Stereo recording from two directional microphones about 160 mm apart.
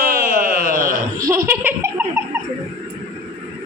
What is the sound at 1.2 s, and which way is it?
Laughter, 20° right (ahead or behind).